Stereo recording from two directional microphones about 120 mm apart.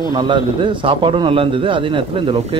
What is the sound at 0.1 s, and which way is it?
A man's voice, 45° right (ahead or behind).